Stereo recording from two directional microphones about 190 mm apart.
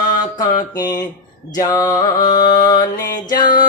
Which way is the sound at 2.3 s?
45° left (ahead or behind).